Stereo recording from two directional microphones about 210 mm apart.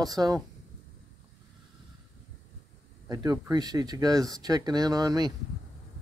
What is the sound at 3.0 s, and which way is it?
Speech, 20° right (ahead or behind).